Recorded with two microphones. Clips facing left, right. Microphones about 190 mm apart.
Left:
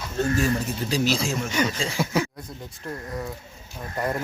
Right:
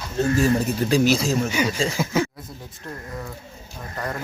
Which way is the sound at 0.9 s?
50° right (ahead or behind).